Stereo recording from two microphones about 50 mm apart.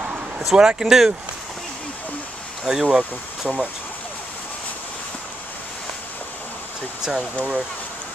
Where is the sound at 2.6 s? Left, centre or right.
Centre.